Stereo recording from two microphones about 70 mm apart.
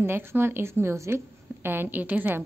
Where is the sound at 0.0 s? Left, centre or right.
Right.